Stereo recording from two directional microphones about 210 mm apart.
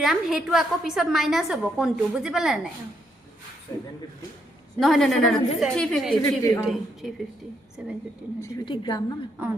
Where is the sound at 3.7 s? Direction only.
15° left (ahead or behind).